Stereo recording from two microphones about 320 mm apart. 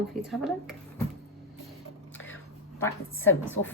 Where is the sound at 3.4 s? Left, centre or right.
Left.